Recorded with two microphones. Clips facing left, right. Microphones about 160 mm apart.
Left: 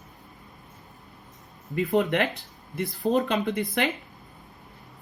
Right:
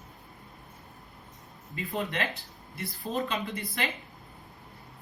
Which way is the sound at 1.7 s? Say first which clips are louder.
Left 10 dB; 70° left (ahead or behind).